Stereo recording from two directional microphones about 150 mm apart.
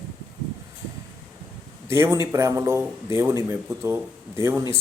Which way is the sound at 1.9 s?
20° right (ahead or behind).